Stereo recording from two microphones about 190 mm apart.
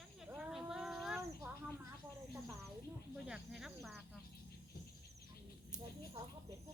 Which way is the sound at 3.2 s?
5° right (ahead or behind).